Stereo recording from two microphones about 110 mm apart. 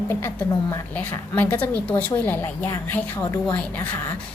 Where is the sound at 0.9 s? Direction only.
15° left (ahead or behind).